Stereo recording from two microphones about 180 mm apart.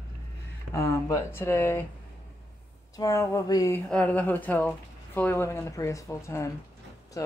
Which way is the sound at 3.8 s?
5° left (ahead or behind).